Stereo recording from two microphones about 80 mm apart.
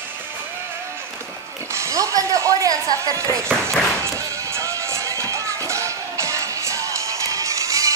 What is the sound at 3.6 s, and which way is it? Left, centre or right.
Music, right.